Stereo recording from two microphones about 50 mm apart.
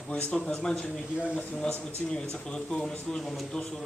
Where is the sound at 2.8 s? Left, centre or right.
Centre.